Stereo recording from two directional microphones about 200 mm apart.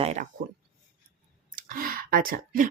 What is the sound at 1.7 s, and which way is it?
Speech, 45° right (ahead or behind).